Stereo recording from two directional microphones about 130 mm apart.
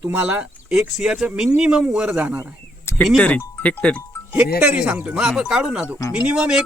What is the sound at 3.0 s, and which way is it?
Speech, 5° left (ahead or behind).